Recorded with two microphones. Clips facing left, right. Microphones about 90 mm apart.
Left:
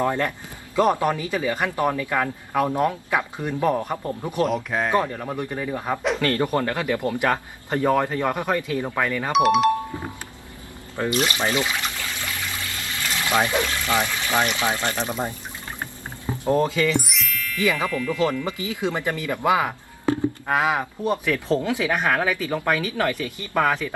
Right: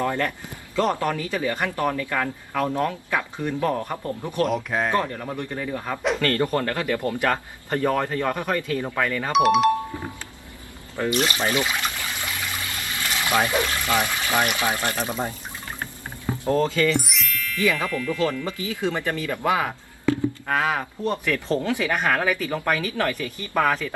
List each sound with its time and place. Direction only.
0.0 s speech: 20° left (ahead or behind)
4.4 s speech: centre (ahead or behind)
4.9 s speech: 10° left (ahead or behind)
9.3 s speech: centre (ahead or behind)
11.5 s trickle: 15° right (ahead or behind)
13.5 s water: 15° right (ahead or behind)
14.0 s speech: 15° right (ahead or behind)
16.4 s speech: 20° left (ahead or behind)
16.9 s music: centre (ahead or behind)
17.6 s speech: 15° left (ahead or behind)
18.1 s speech: 15° left (ahead or behind)